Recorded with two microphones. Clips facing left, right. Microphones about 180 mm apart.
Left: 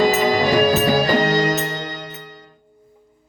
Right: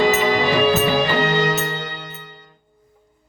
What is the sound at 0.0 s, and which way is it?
Music, 40° left (ahead or behind).